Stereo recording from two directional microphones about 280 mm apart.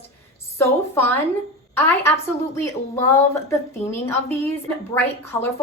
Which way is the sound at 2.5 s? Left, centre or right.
Centre.